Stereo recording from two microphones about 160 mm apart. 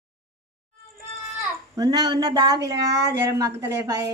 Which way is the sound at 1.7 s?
25° right (ahead or behind).